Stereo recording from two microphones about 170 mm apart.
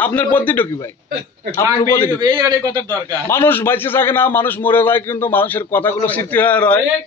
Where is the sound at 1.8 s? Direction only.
15° left (ahead or behind).